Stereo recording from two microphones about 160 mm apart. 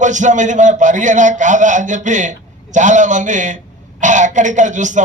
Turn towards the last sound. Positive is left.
turn(degrees=-50)  # may be behind; listen again after turning